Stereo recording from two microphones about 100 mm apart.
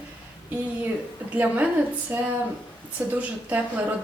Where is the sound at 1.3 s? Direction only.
15° right (ahead or behind).